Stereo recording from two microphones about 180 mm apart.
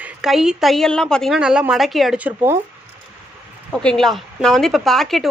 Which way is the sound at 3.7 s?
5° left (ahead or behind).